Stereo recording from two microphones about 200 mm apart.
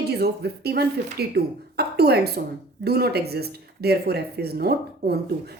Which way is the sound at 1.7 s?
55° right (ahead or behind).